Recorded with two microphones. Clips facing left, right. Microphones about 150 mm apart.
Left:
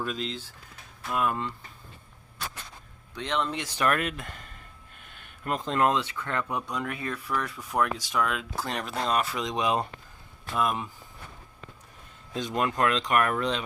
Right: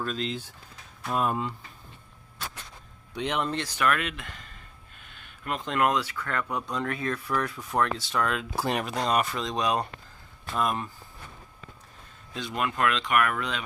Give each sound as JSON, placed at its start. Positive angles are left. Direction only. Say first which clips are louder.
{"t": 0.0, "sound": "speech", "louder": "right 1 dB", "side_deg": 10}
{"t": 1.1, "sound": "speech", "louder": "right 1 dB", "side_deg": -30}
{"t": 3.2, "sound": "speech", "louder": "right 1 dB", "side_deg": -10}
{"t": 3.8, "sound": "speech", "louder": "left 2 dB", "side_deg": 40}
{"t": 6.7, "sound": "speech", "louder": "right 2 dB", "side_deg": 5}
{"t": 7.9, "sound": "speech", "louder": "even", "side_deg": 10}
{"t": 8.6, "sound": "speech", "louder": "right 7 dB", "side_deg": -10}
{"t": 8.9, "sound": "speech", "louder": "right 1 dB", "side_deg": 0}
{"t": 9.4, "sound": "speech", "louder": "even", "side_deg": 20}
{"t": 10.5, "sound": "speech", "louder": "even", "side_deg": 0}
{"t": 12.3, "sound": "speech", "louder": "left 2 dB", "side_deg": 40}